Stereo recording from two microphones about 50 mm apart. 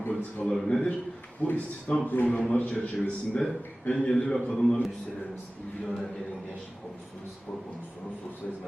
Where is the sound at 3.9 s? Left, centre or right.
Centre.